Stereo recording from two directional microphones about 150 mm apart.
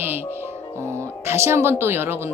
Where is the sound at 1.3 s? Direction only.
15° right (ahead or behind).